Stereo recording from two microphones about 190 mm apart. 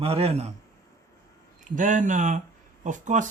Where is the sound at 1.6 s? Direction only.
40° right (ahead or behind).